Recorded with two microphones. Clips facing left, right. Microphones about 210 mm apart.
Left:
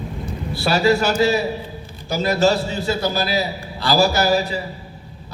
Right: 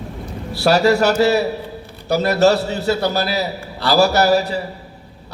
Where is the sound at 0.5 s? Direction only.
70° right (ahead or behind).